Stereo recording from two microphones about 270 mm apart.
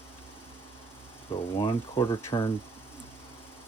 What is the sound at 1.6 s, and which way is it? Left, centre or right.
Speech, centre.